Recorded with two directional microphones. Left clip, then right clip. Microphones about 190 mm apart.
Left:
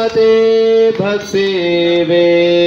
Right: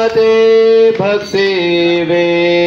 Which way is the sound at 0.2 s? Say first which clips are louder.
Right 1 dB; 55° left (ahead or behind).